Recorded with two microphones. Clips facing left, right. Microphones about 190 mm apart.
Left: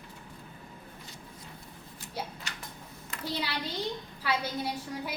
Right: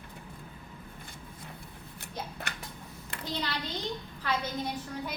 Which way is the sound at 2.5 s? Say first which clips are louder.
Right 3 dB; 55° right (ahead or behind).